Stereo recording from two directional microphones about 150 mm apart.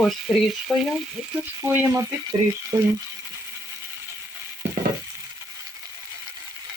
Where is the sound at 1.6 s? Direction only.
15° right (ahead or behind).